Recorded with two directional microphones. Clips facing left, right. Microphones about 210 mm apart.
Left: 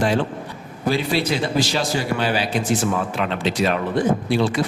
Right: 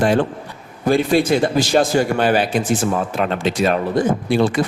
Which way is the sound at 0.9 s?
50° right (ahead or behind).